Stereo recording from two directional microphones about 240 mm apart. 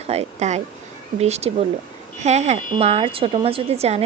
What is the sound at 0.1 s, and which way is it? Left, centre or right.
A woman's voice, right.